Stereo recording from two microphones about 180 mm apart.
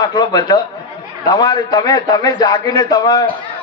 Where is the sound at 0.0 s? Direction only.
20° left (ahead or behind).